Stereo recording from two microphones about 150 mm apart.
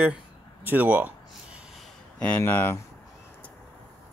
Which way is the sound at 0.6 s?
10° right (ahead or behind).